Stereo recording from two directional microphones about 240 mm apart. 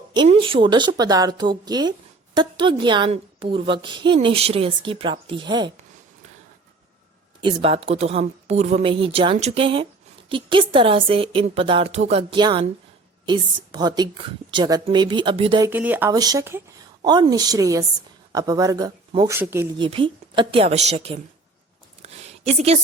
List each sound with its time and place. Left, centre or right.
0.1 s a woman's voice: right
7.4 s a woman's voice: right
15.7 s speech: centre
19.8 s a woman's voice: right
22.0 s a sound: right